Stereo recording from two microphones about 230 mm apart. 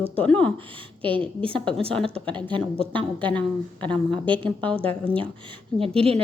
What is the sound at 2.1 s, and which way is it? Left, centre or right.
Speech, right.